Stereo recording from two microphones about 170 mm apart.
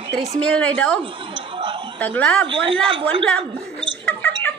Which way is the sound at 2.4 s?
30° right (ahead or behind).